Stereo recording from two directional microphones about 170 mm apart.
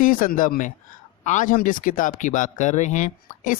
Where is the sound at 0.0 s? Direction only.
55° left (ahead or behind).